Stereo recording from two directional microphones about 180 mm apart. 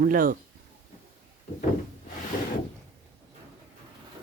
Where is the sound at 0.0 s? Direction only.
50° right (ahead or behind).